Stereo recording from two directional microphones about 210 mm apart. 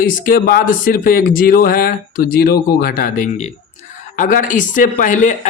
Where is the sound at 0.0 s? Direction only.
40° left (ahead or behind).